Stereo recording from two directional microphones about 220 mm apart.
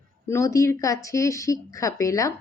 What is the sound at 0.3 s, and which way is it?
Speech, 15° left (ahead or behind).